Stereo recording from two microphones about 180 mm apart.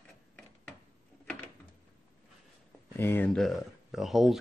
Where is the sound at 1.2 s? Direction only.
10° left (ahead or behind).